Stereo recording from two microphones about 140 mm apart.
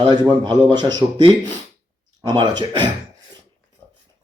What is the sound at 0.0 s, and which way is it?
Speech, 30° right (ahead or behind).